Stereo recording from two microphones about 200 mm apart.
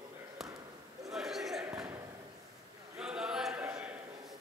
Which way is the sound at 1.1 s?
Centre (ahead or behind).